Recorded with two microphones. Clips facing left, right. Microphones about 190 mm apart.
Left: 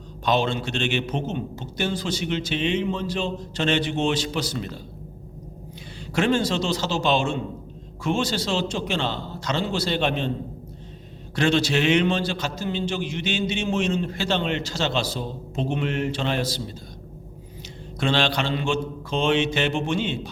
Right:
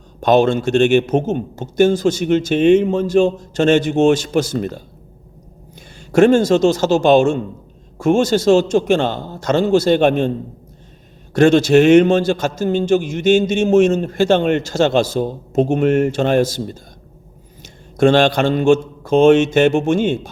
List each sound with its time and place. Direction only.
0.2 s a man's voice: 45° right (ahead or behind)
6.1 s a man's voice: 45° right (ahead or behind)
11.3 s a man's voice: 45° right (ahead or behind)
17.9 s a man's voice: 50° right (ahead or behind)